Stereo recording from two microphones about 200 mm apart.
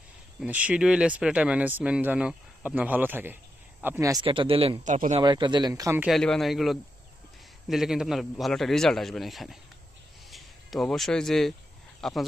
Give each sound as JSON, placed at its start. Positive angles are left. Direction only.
{"t": 0.3, "sound": "speech", "side_deg": -5}
{"t": 4.3, "sound": "speech", "side_deg": -25}
{"t": 5.2, "sound": "speech", "side_deg": -20}
{"t": 6.1, "sound": "a man's voice", "side_deg": 0}